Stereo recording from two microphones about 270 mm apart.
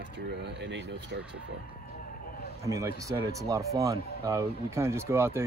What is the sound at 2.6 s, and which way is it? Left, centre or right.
Speech, centre.